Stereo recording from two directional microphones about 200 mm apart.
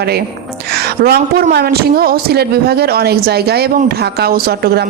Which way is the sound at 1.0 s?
55° right (ahead or behind).